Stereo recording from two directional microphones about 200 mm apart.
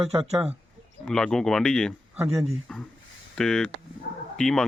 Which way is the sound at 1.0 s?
5° left (ahead or behind).